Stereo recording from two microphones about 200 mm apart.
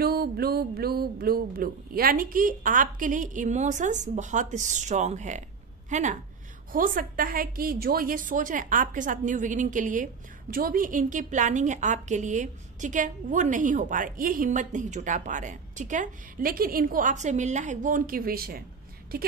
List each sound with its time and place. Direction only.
0.0 s a woman's voice: 50° right (ahead or behind)